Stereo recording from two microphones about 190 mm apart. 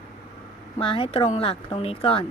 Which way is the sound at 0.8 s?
30° left (ahead or behind).